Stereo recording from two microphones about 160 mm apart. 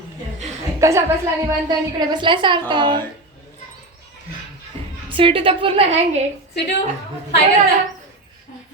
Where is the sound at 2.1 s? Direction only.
30° right (ahead or behind).